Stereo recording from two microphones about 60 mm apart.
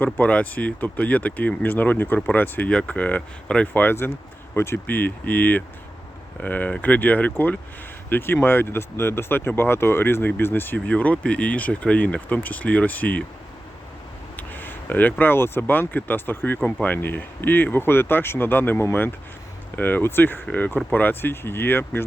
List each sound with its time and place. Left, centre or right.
0.0 s speech: left
4.5 s speech: left
4.9 s speech: left
10.8 s speech: left
14.3 s speech: left